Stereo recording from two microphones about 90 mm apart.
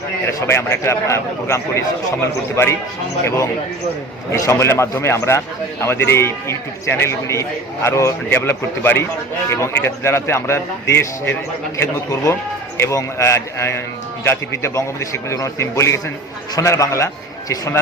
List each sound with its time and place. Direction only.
0.4 s a man's voice: 30° left (ahead or behind)